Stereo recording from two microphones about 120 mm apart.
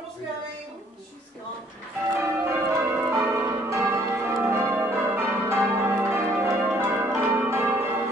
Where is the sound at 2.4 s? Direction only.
20° right (ahead or behind).